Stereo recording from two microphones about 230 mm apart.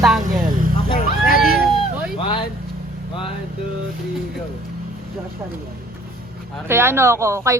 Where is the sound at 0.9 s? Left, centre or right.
Left.